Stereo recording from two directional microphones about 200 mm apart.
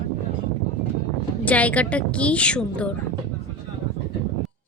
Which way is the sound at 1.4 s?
5° left (ahead or behind).